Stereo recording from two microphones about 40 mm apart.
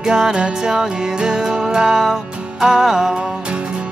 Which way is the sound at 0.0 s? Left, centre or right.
Centre.